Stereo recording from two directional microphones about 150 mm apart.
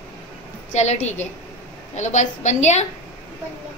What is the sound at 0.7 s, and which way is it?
A woman's voice, 50° left (ahead or behind).